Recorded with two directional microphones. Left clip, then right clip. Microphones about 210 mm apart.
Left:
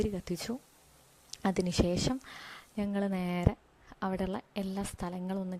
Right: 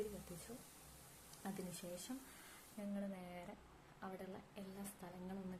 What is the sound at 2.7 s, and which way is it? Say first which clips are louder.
A woman's voice: left 15 dB; 50° left (ahead or behind).